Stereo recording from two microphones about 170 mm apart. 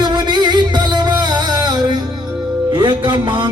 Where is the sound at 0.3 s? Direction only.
25° right (ahead or behind).